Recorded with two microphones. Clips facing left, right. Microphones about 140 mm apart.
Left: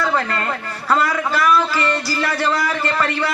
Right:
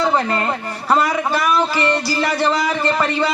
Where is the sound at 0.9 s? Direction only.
15° right (ahead or behind).